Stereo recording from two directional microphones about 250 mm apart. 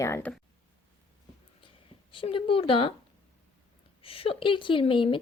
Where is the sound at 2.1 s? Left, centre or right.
Left.